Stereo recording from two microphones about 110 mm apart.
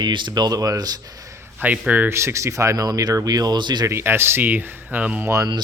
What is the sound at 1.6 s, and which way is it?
Speech, 15° right (ahead or behind).